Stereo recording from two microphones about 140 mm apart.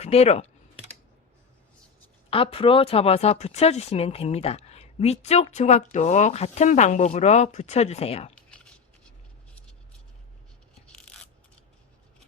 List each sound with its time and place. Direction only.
0.0 s speech: 50° left (ahead or behind)
2.3 s speech: 40° left (ahead or behind)